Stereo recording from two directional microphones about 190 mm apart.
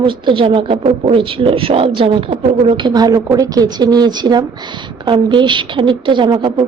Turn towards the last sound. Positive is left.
turn(degrees=-25)  # may be behind; listen again after turning